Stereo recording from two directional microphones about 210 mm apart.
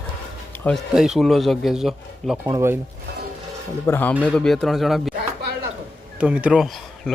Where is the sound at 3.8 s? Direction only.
10° left (ahead or behind).